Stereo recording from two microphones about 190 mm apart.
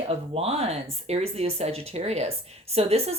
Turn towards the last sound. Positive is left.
turn(degrees=-35)  # may be behind; listen again after turning